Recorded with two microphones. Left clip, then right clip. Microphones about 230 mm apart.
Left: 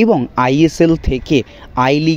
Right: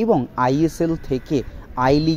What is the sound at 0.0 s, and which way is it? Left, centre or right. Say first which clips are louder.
Speech: left 5 dB; left.